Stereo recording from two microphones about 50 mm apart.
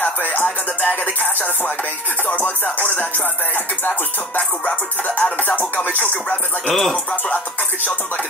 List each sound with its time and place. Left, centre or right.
0.2 s music: left
2.2 s music: left
5.2 s music: left
6.7 s speech: centre